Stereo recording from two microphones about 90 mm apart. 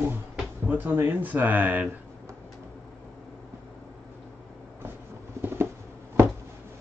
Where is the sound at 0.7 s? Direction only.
20° right (ahead or behind).